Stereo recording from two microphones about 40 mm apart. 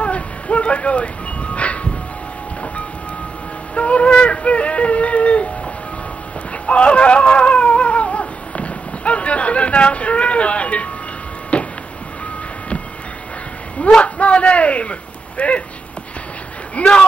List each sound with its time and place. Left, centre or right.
0.0 s music: left
3.7 s a sound: left
6.6 s cat: left
11.5 s a sound: left
13.7 s a man's voice: left
16.7 s speech: left